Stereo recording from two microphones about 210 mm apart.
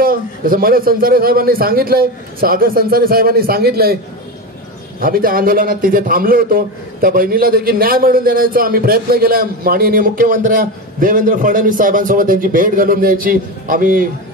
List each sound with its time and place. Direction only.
0.0 s a man's voice: 45° right (ahead or behind)
5.0 s a man's voice: 45° right (ahead or behind)